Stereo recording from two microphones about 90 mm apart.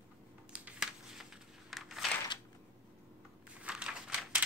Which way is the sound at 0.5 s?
10° right (ahead or behind).